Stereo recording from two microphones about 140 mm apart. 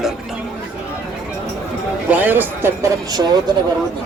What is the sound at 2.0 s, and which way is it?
Speech, 10° right (ahead or behind).